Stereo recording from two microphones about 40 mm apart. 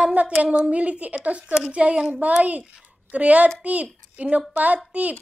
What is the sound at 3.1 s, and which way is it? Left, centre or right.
A woman's voice, right.